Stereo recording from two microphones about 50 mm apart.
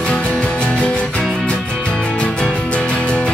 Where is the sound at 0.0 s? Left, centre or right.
Left.